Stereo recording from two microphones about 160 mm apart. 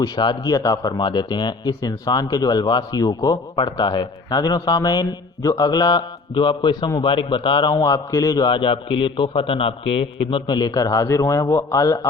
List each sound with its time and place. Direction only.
0.0 s a man's voice: 25° left (ahead or behind)